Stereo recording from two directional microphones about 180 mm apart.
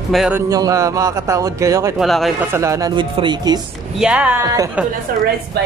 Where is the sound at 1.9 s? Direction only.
Centre (ahead or behind).